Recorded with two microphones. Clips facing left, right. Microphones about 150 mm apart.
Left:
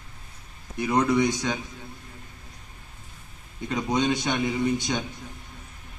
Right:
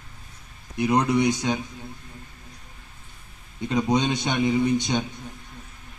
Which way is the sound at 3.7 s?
20° right (ahead or behind).